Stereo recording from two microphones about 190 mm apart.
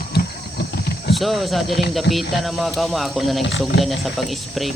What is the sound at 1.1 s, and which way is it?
Speech, centre (ahead or behind).